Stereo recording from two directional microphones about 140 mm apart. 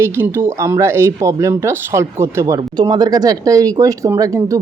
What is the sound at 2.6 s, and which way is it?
Speech, 30° right (ahead or behind).